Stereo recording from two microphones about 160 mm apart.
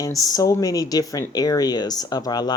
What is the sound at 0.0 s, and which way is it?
Speech, 25° left (ahead or behind).